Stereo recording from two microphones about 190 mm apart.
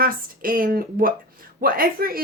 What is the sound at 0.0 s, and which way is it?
A woman's voice, 50° right (ahead or behind).